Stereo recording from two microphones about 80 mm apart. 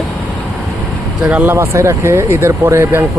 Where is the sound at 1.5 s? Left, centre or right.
Right.